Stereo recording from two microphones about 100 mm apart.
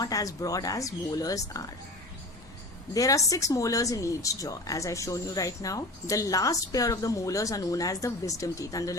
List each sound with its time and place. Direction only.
0.0 s speech: 35° left (ahead or behind)
2.9 s speech: 35° left (ahead or behind)